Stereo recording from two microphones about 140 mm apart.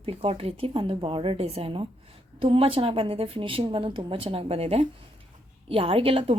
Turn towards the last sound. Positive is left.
turn(degrees=-40)  # may be behind; listen again after turning